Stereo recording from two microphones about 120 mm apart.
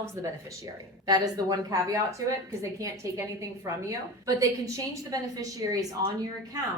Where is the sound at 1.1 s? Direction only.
35° right (ahead or behind).